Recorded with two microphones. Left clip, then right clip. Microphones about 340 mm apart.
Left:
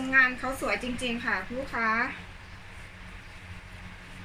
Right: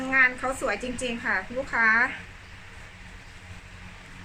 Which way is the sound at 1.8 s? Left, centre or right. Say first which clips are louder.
Right 6 dB; right.